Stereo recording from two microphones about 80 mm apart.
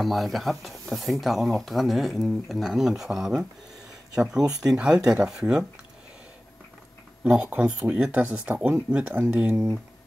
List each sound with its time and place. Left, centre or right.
0.0 s speech: centre
7.2 s speech: centre